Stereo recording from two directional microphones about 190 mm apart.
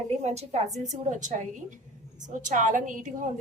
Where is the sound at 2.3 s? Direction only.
40° right (ahead or behind).